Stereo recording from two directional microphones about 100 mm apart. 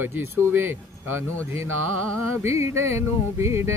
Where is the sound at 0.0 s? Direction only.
25° right (ahead or behind).